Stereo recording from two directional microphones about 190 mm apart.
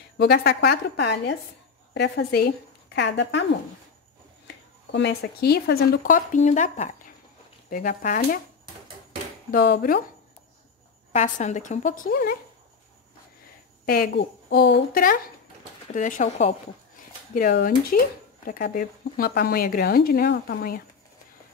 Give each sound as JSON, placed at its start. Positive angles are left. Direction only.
{"t": 0.2, "sound": "a woman's voice", "side_deg": 55}
{"t": 4.9, "sound": "speech", "side_deg": 60}
{"t": 9.5, "sound": "speech", "side_deg": 50}
{"t": 11.1, "sound": "a woman's voice", "side_deg": 40}
{"t": 13.8, "sound": "a woman's voice", "side_deg": 55}
{"t": 17.3, "sound": "speech", "side_deg": 50}